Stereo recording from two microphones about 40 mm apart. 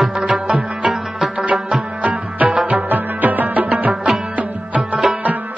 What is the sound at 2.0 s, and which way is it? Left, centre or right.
Music, right.